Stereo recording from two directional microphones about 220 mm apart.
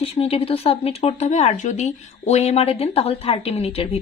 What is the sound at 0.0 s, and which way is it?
Speech, 25° left (ahead or behind).